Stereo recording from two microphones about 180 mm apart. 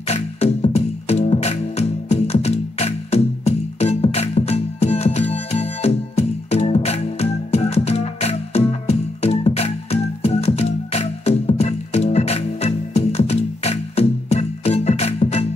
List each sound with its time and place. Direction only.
0.1 s music: 35° left (ahead or behind)